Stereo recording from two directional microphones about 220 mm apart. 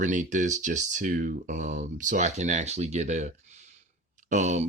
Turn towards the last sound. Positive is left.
turn(degrees=-30)  # may be behind; listen again after turning